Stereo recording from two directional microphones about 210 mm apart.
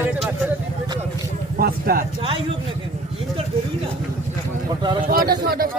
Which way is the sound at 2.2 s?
25° right (ahead or behind).